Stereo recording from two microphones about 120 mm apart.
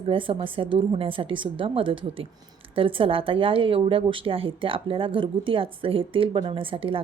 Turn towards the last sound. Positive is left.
turn(degrees=-50)  # may be behind; listen again after turning